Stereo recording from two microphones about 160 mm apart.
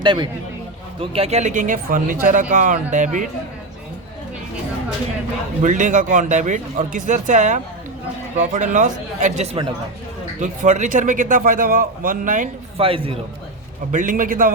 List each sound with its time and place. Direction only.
0.0 s a man's voice: 30° right (ahead or behind); by 3.2 s 50° right (ahead or behind)
5.6 s a man's voice: 50° right (ahead or behind)
12.7 s a man's voice: 35° right (ahead or behind)
13.9 s a man's voice: 55° right (ahead or behind)